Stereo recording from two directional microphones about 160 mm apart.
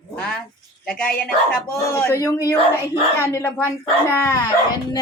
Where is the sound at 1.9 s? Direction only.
15° left (ahead or behind).